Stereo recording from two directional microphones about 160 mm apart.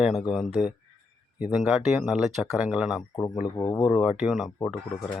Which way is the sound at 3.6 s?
25° left (ahead or behind).